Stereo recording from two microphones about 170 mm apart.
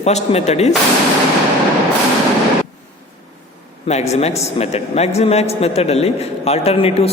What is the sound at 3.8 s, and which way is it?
A man's voice, 40° left (ahead or behind).